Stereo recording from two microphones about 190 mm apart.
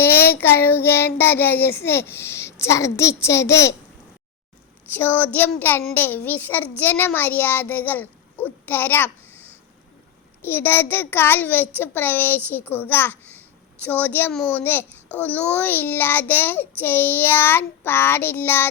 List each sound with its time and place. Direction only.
0.0 s a child's voice: 10° left (ahead or behind)
4.9 s a child's voice: 10° left (ahead or behind)
10.4 s a child's voice: 10° left (ahead or behind)